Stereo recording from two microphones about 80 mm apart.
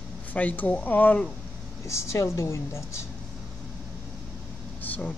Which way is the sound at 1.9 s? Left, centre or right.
Left.